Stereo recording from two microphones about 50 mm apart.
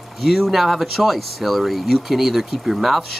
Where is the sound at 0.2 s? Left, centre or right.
Centre.